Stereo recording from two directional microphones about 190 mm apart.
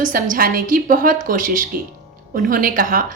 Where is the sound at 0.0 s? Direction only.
45° right (ahead or behind).